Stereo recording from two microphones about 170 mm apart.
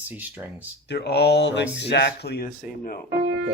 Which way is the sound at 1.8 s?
80° left.